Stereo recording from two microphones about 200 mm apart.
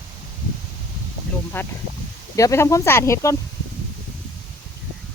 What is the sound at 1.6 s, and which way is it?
Speech, 10° left (ahead or behind).